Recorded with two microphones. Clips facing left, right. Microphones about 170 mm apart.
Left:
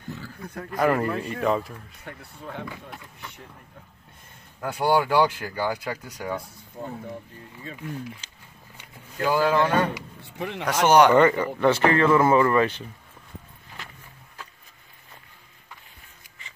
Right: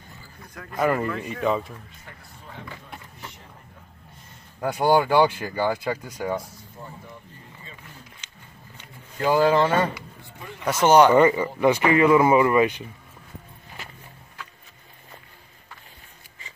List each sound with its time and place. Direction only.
0.1 s a sound: 75° left (ahead or behind)
0.7 s a man's voice: centre (ahead or behind)
2.0 s speech: 65° left (ahead or behind)
4.6 s speech: 15° right (ahead or behind)
4.9 s a man's voice: 5° left (ahead or behind)
5.2 s speech: 10° right (ahead or behind)
8.2 s a sound: 30° left (ahead or behind)
9.4 s speech: 10° right (ahead or behind)